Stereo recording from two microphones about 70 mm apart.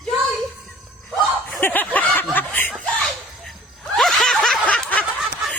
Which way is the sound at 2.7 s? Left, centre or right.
Centre.